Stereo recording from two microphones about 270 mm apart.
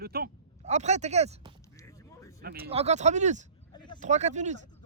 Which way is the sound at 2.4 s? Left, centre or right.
Right.